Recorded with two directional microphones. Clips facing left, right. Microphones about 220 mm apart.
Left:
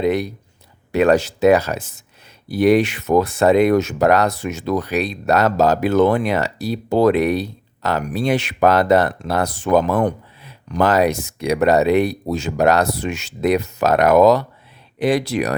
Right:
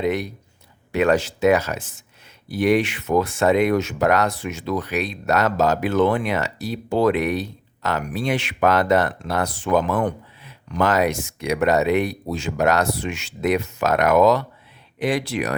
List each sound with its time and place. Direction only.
0.0 s speech: 35° left (ahead or behind)